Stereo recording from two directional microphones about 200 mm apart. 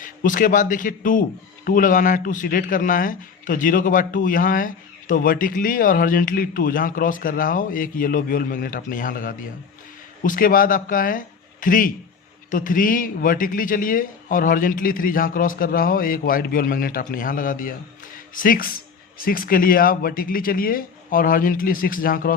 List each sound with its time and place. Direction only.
0.0 s a man's voice: 40° left (ahead or behind)